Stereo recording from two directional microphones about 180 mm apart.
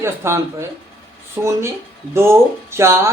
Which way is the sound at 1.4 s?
10° right (ahead or behind).